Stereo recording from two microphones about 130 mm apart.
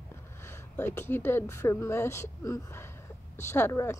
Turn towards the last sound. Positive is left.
turn(degrees=20)  # may be behind; listen again after turning